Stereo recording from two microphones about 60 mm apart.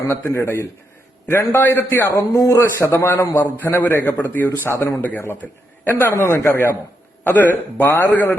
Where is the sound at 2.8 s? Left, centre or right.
Left.